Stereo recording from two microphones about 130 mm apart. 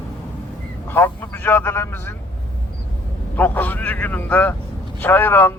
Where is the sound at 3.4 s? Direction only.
15° left (ahead or behind).